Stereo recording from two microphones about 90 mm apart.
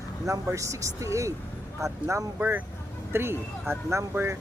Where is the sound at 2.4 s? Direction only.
20° right (ahead or behind).